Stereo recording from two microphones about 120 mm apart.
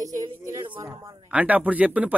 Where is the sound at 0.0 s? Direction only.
25° right (ahead or behind).